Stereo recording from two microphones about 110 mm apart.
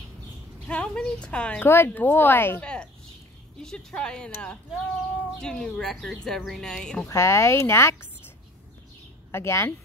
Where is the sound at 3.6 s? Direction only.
5° left (ahead or behind).